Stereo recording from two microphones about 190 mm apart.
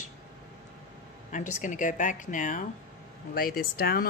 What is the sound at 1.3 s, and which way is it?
A man's voice, 40° left (ahead or behind).